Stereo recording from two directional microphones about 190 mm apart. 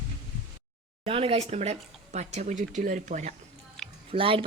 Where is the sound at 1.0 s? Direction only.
30° right (ahead or behind).